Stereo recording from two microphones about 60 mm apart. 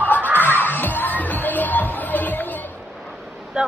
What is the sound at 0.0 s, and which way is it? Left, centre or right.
Music, left.